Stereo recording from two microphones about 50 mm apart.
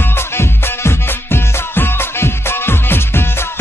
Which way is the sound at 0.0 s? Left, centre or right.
Left.